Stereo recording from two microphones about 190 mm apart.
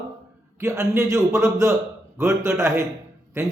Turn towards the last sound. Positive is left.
turn(degrees=-15)  # may be behind; listen again after turning